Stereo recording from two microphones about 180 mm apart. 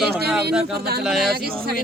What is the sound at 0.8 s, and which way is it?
Speech, 60° right (ahead or behind).